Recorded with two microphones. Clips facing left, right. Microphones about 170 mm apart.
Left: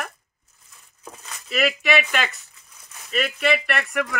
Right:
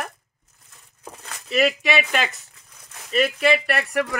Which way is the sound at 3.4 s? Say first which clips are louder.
Right 2 dB; 30° right (ahead or behind).